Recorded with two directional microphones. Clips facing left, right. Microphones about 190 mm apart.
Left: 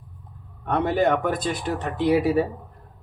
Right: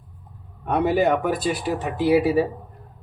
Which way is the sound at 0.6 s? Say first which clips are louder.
Right 2 dB; 10° right (ahead or behind).